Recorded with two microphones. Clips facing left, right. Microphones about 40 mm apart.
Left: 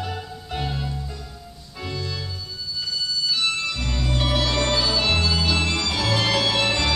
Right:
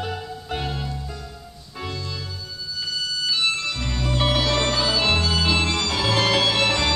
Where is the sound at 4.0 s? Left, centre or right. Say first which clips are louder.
Right 2 dB; centre.